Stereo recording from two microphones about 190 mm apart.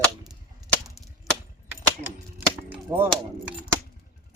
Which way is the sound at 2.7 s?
10° right (ahead or behind).